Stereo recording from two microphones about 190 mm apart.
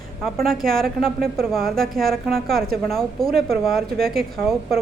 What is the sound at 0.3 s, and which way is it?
A woman's voice, centre (ahead or behind).